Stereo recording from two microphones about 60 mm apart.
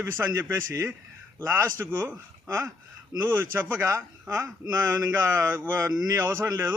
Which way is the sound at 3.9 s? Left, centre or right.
Right.